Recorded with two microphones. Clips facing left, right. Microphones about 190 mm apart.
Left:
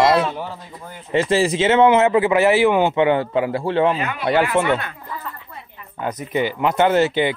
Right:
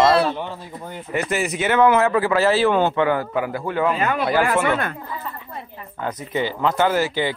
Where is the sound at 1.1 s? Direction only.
30° left (ahead or behind).